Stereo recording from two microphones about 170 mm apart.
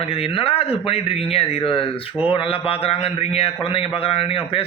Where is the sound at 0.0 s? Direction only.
35° left (ahead or behind).